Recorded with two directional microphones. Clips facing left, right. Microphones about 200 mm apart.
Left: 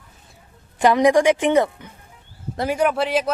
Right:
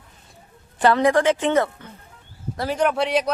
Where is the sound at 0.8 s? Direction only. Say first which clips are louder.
Left 2 dB; 15° left (ahead or behind).